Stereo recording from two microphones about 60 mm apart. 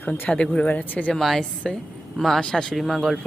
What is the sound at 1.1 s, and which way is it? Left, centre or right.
Speech, centre.